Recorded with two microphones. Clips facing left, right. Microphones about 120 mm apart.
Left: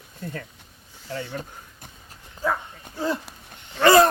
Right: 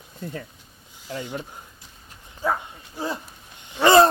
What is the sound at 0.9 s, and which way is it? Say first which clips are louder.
Speech: even; 15° right (ahead or behind).